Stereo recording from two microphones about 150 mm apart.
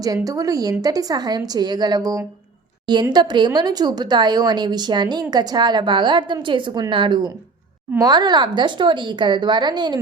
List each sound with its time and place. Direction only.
0.0 s speech: 25° right (ahead or behind)